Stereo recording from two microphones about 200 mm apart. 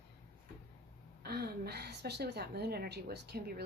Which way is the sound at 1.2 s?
50° right (ahead or behind).